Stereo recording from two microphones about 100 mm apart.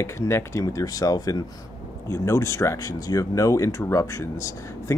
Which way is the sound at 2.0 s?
30° left (ahead or behind).